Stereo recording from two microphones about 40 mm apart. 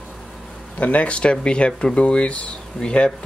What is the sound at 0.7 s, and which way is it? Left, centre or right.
Speech, left.